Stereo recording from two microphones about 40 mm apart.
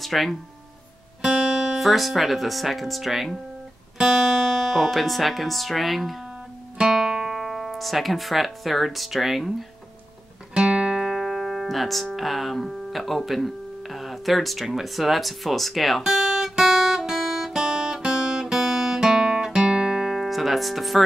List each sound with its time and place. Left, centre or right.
0.0 s speech: centre
6.8 s music: centre
7.3 s speech: centre
10.5 s music: right
11.1 s speech: centre
16.0 s guitar: centre
20.2 s music: centre